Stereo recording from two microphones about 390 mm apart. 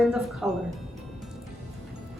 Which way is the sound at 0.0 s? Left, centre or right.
Centre.